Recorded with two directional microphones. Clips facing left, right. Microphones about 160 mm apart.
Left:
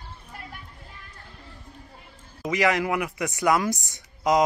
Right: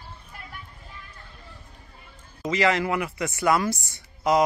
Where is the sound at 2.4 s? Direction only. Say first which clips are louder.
Even; 15° left (ahead or behind).